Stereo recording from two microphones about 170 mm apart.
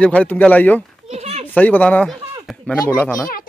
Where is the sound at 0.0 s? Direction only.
5° left (ahead or behind).